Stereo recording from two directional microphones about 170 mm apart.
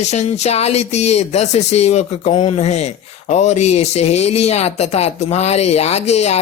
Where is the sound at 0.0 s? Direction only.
40° left (ahead or behind).